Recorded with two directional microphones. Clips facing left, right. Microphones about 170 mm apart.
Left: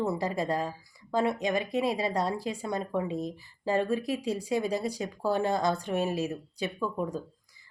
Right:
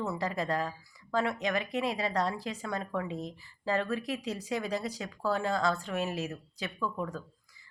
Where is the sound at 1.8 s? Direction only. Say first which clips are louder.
Left 2 dB; 10° left (ahead or behind).